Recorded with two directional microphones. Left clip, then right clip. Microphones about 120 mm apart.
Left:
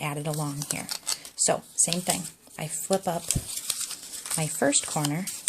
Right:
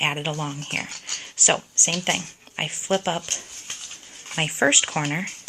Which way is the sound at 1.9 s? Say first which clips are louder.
Right 5 dB; 15° left (ahead or behind).